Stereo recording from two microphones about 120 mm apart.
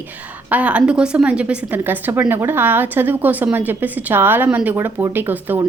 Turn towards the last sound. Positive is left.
turn(degrees=-15)  # may be behind; listen again after turning